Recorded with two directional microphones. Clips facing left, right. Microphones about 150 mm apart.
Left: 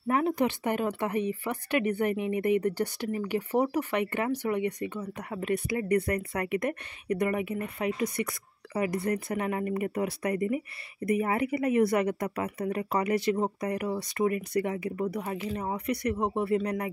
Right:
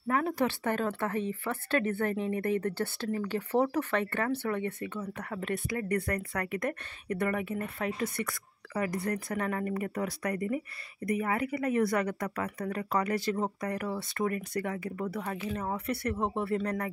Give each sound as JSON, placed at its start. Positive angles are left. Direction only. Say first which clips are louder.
{"t": 0.1, "sound": "speech", "louder": "left 3 dB", "side_deg": 20}